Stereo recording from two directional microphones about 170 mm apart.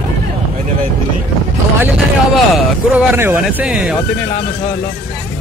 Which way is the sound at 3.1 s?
10° right (ahead or behind).